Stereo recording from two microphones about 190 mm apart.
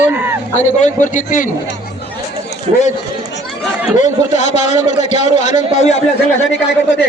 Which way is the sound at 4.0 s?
40° left (ahead or behind).